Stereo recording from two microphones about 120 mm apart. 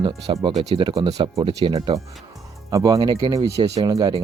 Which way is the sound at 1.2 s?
45° right (ahead or behind).